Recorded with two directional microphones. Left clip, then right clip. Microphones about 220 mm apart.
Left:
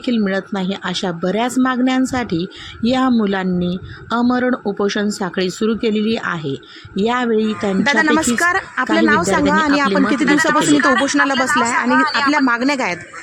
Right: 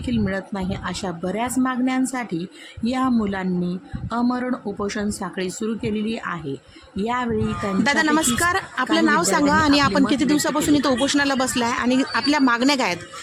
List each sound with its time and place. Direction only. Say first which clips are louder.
0.0 s speech: left 6 dB; 15° left (ahead or behind)